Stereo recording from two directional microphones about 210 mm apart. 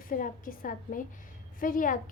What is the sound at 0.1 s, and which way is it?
A woman's voice, 40° left (ahead or behind).